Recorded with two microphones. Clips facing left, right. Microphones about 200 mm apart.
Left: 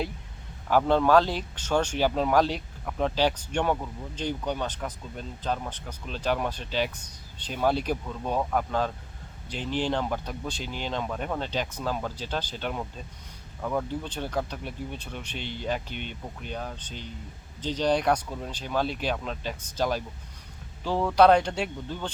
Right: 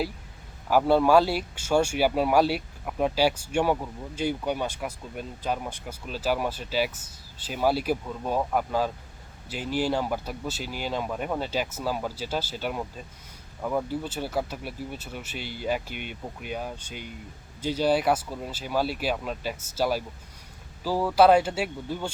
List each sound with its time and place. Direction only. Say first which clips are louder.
0.7 s speech: right 1 dB; 10° right (ahead or behind)